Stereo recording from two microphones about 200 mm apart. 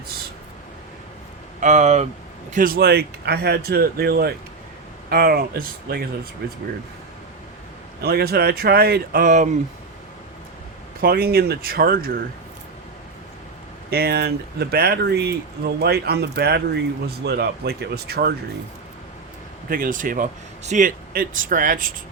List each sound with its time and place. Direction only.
1.6 s speech: 35° right (ahead or behind); by 6.6 s 50° right (ahead or behind)
8.0 s speech: 50° right (ahead or behind)
11.0 s speech: 50° right (ahead or behind)
13.9 s speech: 50° right (ahead or behind)
19.7 s speech: 40° right (ahead or behind)